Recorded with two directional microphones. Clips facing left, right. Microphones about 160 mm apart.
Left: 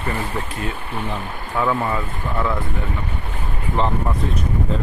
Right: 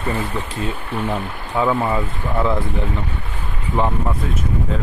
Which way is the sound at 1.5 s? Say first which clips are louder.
Right 2 dB; 15° right (ahead or behind).